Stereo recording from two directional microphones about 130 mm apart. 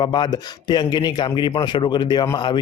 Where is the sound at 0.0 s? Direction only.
35° left (ahead or behind).